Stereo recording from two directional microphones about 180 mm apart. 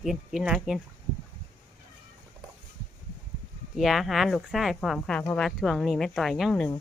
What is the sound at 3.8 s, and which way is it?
Speech, centre (ahead or behind).